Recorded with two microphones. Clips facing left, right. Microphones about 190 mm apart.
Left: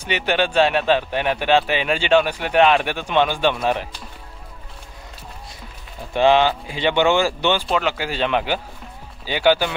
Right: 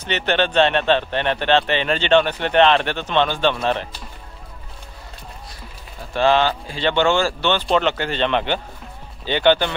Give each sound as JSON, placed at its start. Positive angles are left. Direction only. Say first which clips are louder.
{"t": 0.0, "sound": "speech", "louder": "even", "side_deg": 10}
{"t": 6.1, "sound": "speech", "louder": "left 2 dB", "side_deg": 15}